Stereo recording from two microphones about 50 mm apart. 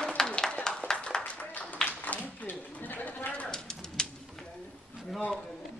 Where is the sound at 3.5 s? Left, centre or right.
Centre.